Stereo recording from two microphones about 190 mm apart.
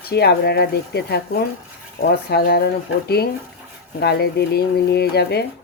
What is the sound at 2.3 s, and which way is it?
Speech, 60° left (ahead or behind).